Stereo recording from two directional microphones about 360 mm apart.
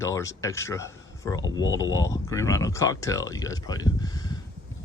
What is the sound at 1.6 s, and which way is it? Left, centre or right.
Speech, left.